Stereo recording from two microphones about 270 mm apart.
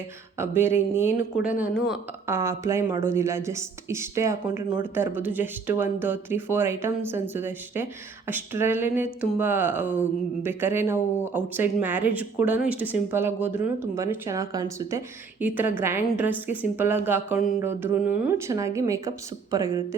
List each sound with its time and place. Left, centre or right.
0.3 s speech: centre